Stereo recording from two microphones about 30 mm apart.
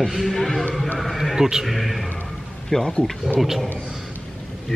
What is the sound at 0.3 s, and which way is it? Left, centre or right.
Speech, centre.